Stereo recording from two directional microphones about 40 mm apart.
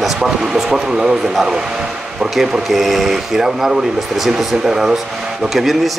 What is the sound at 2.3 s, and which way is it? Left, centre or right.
Speech, centre.